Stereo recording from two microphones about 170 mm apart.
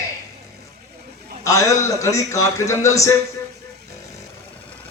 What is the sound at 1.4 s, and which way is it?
A man's voice, 20° left (ahead or behind).